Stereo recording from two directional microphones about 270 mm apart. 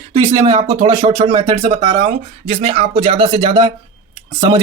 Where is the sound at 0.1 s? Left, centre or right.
Centre.